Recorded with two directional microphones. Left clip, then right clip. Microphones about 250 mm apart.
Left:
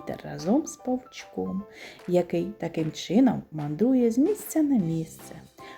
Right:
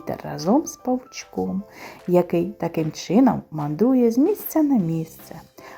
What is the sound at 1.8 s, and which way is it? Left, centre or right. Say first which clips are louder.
Speech: right 5 dB; centre.